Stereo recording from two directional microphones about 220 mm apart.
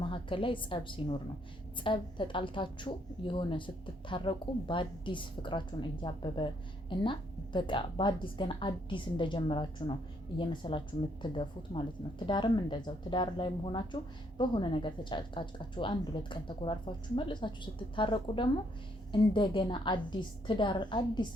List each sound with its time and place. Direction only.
0.0 s a woman's voice: 25° left (ahead or behind)